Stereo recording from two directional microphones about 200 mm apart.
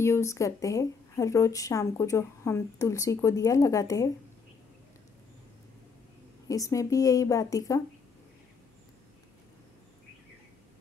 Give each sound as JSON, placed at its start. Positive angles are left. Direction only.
{"t": 0.0, "sound": "speech", "side_deg": 15}
{"t": 6.4, "sound": "speech", "side_deg": 15}